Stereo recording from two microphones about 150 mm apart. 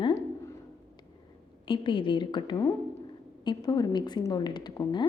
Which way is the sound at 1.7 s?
35° left (ahead or behind).